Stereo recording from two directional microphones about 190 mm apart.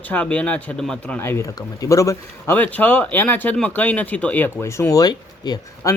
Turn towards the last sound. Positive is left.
turn(degrees=20)  # may be behind; listen again after turning